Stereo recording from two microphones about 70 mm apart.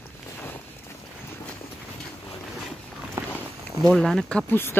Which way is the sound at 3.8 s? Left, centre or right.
Centre.